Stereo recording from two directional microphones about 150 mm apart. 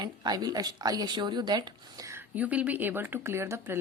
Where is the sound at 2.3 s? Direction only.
10° right (ahead or behind).